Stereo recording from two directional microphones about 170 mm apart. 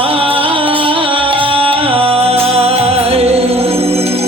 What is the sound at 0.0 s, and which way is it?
Music, 35° right (ahead or behind).